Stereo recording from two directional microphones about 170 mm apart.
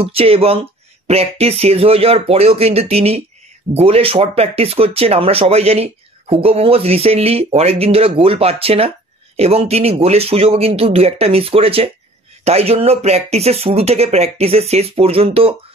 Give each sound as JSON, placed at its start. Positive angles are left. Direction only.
{"t": 0.0, "sound": "speech", "side_deg": -35}